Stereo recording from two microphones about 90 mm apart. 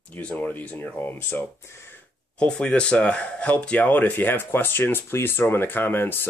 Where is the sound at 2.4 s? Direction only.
10° left (ahead or behind).